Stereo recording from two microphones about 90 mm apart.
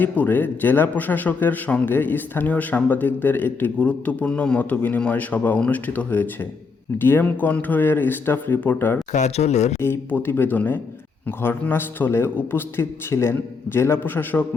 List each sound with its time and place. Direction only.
0.0 s a man's voice: 20° left (ahead or behind)